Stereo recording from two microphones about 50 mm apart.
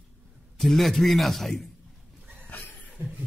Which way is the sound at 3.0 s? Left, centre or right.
Right.